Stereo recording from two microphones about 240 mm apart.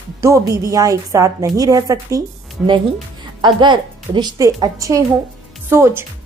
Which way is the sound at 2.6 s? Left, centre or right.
Centre.